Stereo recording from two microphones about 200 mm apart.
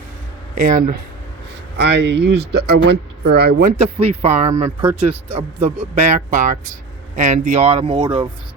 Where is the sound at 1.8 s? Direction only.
60° right (ahead or behind).